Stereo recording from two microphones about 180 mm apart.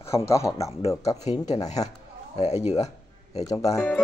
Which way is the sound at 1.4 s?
40° left (ahead or behind).